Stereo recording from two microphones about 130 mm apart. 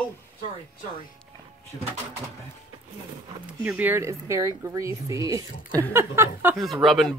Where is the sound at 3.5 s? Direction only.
15° right (ahead or behind).